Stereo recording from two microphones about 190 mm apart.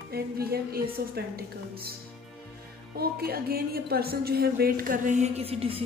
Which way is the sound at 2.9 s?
55° right (ahead or behind).